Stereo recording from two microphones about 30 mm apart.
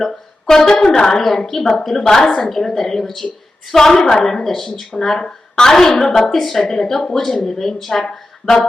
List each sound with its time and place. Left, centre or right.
0.0 s a woman's voice: centre